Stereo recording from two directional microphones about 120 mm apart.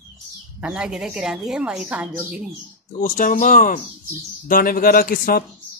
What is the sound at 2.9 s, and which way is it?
Speech, 90° left.